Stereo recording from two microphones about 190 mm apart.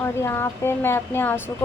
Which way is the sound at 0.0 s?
15° left (ahead or behind).